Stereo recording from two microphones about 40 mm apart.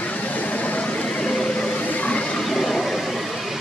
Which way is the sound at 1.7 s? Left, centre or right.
Left.